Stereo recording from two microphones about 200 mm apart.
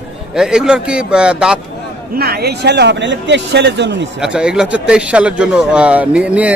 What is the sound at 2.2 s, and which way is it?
Speech, 55° right (ahead or behind).